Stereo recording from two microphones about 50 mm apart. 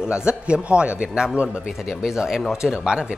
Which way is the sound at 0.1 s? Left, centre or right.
Centre.